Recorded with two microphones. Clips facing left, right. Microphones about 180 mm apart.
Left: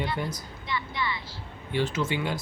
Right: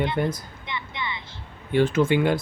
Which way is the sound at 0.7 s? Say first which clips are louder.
Left 1 dB; 20° right (ahead or behind).